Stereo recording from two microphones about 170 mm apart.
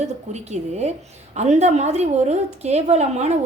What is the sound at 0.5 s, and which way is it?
A woman's voice, 40° right (ahead or behind).